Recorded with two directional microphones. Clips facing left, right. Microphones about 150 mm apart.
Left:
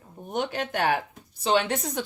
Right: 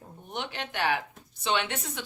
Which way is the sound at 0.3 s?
45° left (ahead or behind).